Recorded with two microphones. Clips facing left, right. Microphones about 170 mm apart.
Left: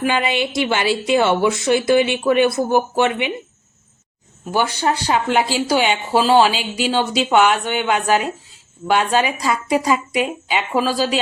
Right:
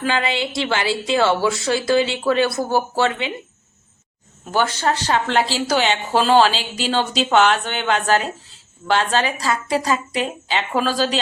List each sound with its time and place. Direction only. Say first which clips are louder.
0.0 s a woman's voice: left 2 dB; 20° left (ahead or behind)
4.5 s speech: left 1 dB; 10° left (ahead or behind)